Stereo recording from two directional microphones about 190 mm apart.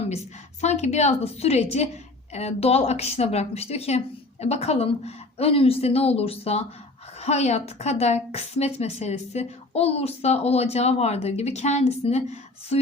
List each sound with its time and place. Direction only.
0.6 s a woman's voice: 35° left (ahead or behind)